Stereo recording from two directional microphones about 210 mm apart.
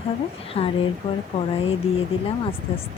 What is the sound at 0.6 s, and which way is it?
Speech, 30° left (ahead or behind).